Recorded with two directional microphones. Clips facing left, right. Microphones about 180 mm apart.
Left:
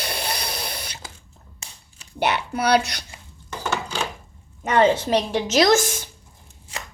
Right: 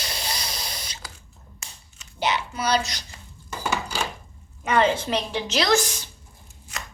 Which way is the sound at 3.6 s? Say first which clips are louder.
Left 1 dB; 10° right (ahead or behind).